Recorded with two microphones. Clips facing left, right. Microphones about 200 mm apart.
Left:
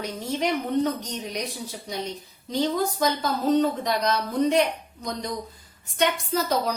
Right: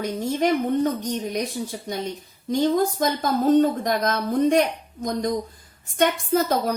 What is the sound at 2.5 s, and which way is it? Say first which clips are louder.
A woman's voice: right 4 dB; 50° right (ahead or behind).